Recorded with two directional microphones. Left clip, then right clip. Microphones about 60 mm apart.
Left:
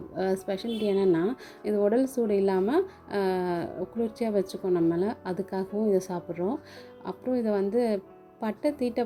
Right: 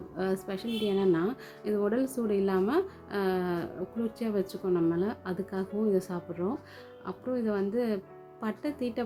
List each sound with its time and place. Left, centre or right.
0.2 s speech: left